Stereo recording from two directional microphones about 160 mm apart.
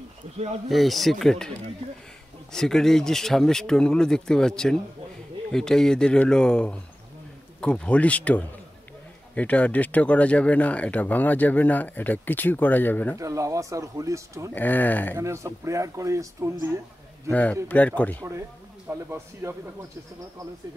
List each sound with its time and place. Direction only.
0.7 s speech: centre (ahead or behind)
2.5 s speech: 5° left (ahead or behind)
13.2 s speech: 20° right (ahead or behind)
14.5 s speech: 10° left (ahead or behind)
15.1 s speech: 20° right (ahead or behind)
17.3 s speech: 10° left (ahead or behind)
18.9 s speech: 15° right (ahead or behind)